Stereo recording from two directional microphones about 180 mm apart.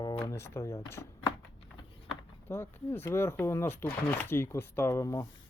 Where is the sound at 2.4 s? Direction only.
10° left (ahead or behind).